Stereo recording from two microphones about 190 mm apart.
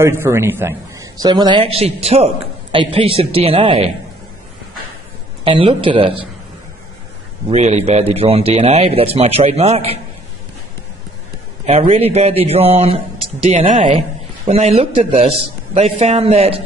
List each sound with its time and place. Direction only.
0.0 s a man's voice: 15° right (ahead or behind); by 3.9 s 30° right (ahead or behind)
5.4 s a man's voice: 25° right (ahead or behind)
7.4 s speech: 35° right (ahead or behind)
11.6 s speech: 35° right (ahead or behind)